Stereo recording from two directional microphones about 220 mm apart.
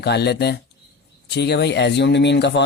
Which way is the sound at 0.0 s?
50° left (ahead or behind).